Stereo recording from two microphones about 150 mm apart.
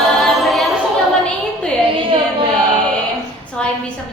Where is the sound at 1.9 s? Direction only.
35° right (ahead or behind).